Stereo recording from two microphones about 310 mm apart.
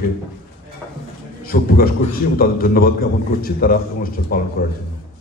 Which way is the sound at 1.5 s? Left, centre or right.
Left.